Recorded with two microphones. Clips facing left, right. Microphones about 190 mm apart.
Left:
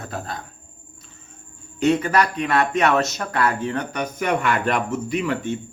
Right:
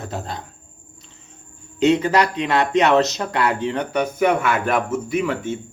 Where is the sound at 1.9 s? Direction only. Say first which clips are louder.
Right 2 dB; 20° right (ahead or behind).